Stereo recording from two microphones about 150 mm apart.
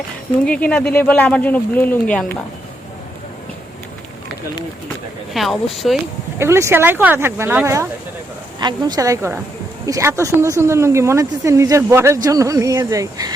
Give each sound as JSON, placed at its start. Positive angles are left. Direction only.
{"t": 0.4, "sound": "speech", "side_deg": 10}
{"t": 5.3, "sound": "speech", "side_deg": 0}
{"t": 6.4, "sound": "speech", "side_deg": -15}